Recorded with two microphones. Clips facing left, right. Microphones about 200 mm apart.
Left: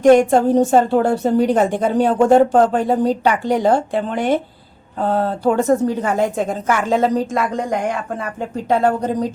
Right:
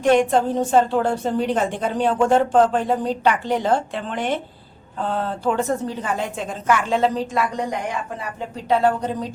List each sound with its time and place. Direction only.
0.0 s a woman's voice: 45° left (ahead or behind)